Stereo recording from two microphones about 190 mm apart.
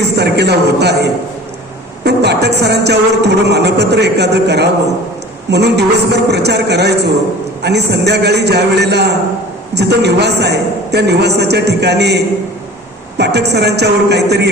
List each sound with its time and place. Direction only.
0.2 s a man's voice: 60° right (ahead or behind)
2.0 s music: 60° right (ahead or behind)